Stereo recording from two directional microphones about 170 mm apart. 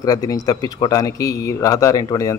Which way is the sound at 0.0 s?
20° left (ahead or behind).